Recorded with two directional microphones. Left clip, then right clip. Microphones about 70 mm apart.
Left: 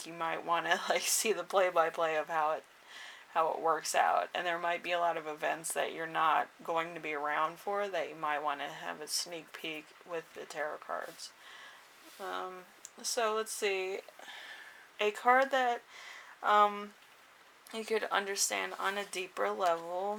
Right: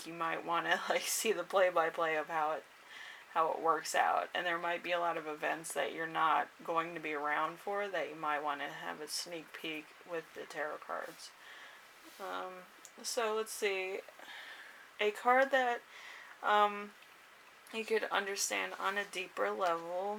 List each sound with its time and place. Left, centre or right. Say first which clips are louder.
0.0 s speech: left 1 dB; left
10.6 s speech: left 2 dB; left
12.2 s speech: left 2 dB; left